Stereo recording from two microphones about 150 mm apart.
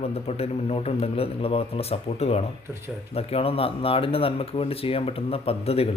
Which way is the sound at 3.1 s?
40° left (ahead or behind).